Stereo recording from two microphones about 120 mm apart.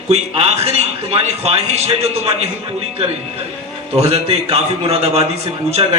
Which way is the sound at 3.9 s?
60° right (ahead or behind).